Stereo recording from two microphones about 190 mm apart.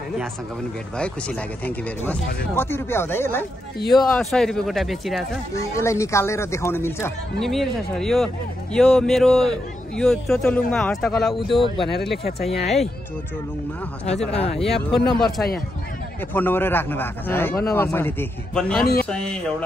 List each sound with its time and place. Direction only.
2.0 s a man's voice: 10° left (ahead or behind)
3.9 s a man's voice: centre (ahead or behind)
5.8 s a man's voice: 15° left (ahead or behind)
7.3 s a man's voice: centre (ahead or behind)
12.6 s a man's voice: centre (ahead or behind)
14.3 s speech: 30° left (ahead or behind)
14.6 s a man's voice: centre (ahead or behind)